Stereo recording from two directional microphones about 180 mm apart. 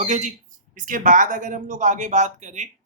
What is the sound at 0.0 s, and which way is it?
A woman's voice, 45° right (ahead or behind).